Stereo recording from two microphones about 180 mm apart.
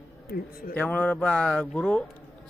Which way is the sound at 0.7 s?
10° left (ahead or behind).